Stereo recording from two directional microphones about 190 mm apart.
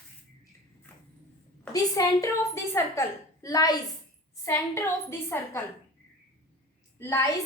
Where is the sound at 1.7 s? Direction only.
20° left (ahead or behind).